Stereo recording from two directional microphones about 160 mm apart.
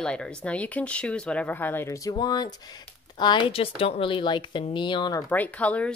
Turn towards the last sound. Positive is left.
turn(degrees=10)  # may be behind; listen again after turning